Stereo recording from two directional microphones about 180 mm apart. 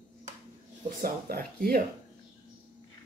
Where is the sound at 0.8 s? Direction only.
50° right (ahead or behind).